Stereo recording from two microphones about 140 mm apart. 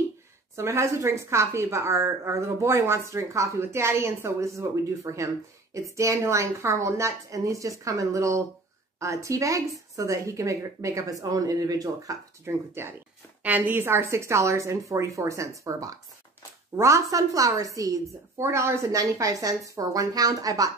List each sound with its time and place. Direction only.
0.6 s a woman's voice: 20° right (ahead or behind)